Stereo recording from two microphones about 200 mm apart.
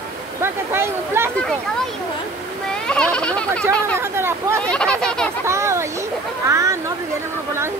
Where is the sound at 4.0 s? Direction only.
10° right (ahead or behind).